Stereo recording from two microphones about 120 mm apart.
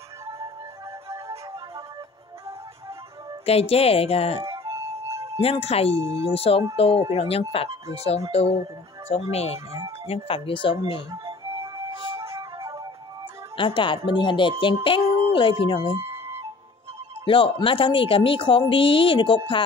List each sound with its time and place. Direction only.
3.4 s speech: 55° left (ahead or behind)
4.4 s music: 25° right (ahead or behind)
5.4 s a woman's voice: 55° left (ahead or behind)
9.7 s speech: 25° right (ahead or behind)
10.0 s a woman's voice: 55° left (ahead or behind)
11.5 s music: 25° right (ahead or behind)
13.6 s a woman's voice: 45° left (ahead or behind)
16.0 s flute: 20° right (ahead or behind)
17.2 s a woman's voice: 45° left (ahead or behind)